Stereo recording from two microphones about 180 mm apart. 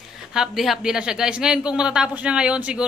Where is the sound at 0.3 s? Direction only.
Centre (ahead or behind).